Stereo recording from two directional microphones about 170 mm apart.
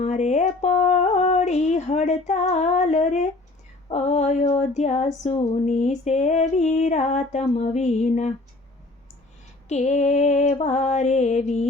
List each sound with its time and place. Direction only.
0.0 s a sound: 45° left (ahead or behind)
3.8 s female singing: 40° left (ahead or behind)
9.6 s female singing: 45° left (ahead or behind)